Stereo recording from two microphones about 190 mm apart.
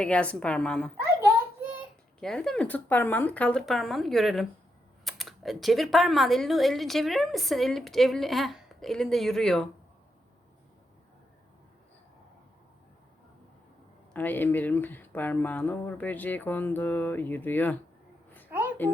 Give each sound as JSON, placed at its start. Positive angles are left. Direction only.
{"t": 0.0, "sound": "speech", "side_deg": 5}
{"t": 2.2, "sound": "speech", "side_deg": 5}
{"t": 14.1, "sound": "speech", "side_deg": 10}
{"t": 18.8, "sound": "speech", "side_deg": 10}